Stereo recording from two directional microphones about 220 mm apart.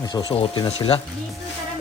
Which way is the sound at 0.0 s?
20° left (ahead or behind).